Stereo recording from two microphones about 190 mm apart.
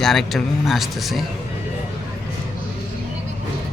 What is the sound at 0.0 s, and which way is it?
Speech, centre (ahead or behind).